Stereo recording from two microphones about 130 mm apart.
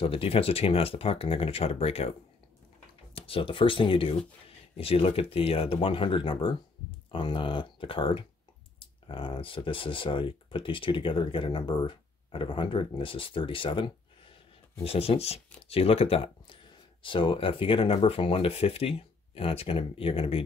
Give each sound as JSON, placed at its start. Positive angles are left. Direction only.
{"t": 0.0, "sound": "speech", "side_deg": 45}
{"t": 3.2, "sound": "speech", "side_deg": 45}